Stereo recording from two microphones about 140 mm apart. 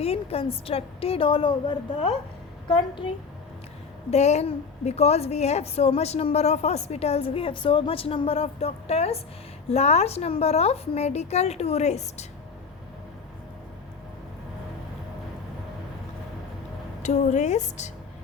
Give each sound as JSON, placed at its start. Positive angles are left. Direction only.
{"t": 0.0, "sound": "a woman's voice", "side_deg": 45}
{"t": 4.1, "sound": "a woman's voice", "side_deg": 50}
{"t": 17.0, "sound": "speech", "side_deg": 55}